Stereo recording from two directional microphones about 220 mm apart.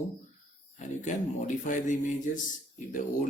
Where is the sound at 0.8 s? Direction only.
35° left (ahead or behind).